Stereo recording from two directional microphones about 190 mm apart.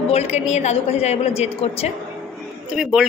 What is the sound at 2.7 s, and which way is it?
Speech, 5° right (ahead or behind).